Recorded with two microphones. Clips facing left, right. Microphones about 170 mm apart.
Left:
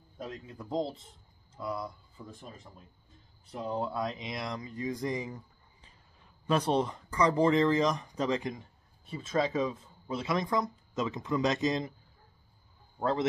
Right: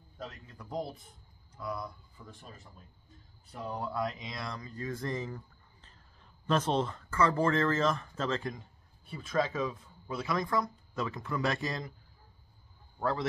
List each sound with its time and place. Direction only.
0.7 s speech: 25° left (ahead or behind)
3.5 s speech: 25° left (ahead or behind)